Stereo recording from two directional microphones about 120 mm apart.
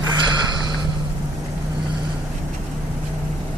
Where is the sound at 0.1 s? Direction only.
40° right (ahead or behind).